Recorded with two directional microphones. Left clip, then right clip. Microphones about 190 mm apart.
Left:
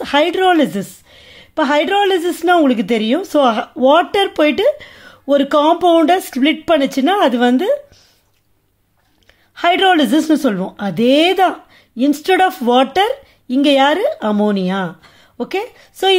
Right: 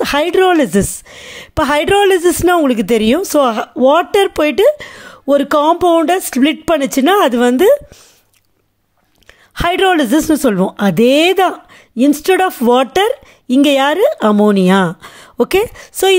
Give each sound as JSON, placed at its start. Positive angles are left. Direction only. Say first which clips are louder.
{"t": 0.0, "sound": "speech", "louder": "right 2 dB", "side_deg": -35}
{"t": 9.6, "sound": "speech", "louder": "even", "side_deg": -35}